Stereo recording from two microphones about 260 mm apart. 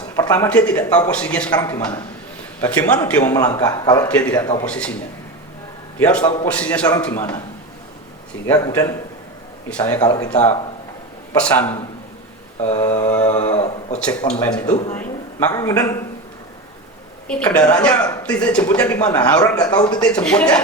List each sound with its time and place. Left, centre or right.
0.2 s a man's voice: centre
6.0 s speech: centre
7.1 s a man's voice: centre
8.4 s a man's voice: centre
12.6 s speech: left
14.9 s a man's voice: centre
17.2 s speech: centre